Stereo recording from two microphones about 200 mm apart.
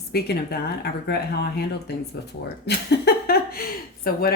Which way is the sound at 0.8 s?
50° left (ahead or behind).